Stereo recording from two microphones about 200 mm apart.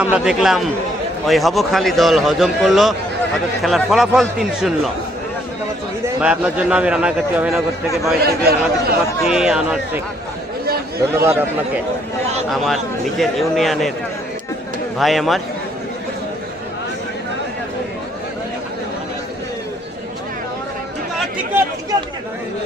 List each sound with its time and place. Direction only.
0.0 s a man's voice: 5° right (ahead or behind)
6.1 s a man's voice: 5° right (ahead or behind)
8.2 s speech: 50° right (ahead or behind)
9.3 s a man's voice: centre (ahead or behind)
11.1 s a man's voice: 10° right (ahead or behind)
14.9 s a man's voice: centre (ahead or behind)
21.5 s chatter: 10° right (ahead or behind)